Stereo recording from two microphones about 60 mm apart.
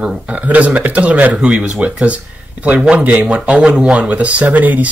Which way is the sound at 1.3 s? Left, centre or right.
Centre.